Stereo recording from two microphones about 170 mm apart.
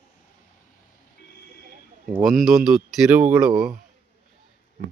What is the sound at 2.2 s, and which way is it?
Speech, centre (ahead or behind).